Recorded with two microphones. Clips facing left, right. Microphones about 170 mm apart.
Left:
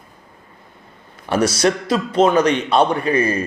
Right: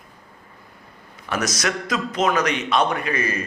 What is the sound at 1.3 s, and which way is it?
A man's voice, 30° left (ahead or behind).